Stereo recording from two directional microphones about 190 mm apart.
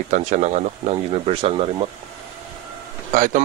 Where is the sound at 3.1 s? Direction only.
45° right (ahead or behind).